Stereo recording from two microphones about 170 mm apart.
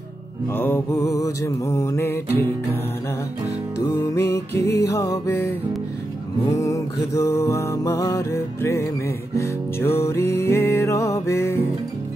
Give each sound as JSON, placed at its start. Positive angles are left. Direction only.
{"t": 0.5, "sound": "music", "side_deg": 10}
{"t": 3.8, "sound": "music", "side_deg": 15}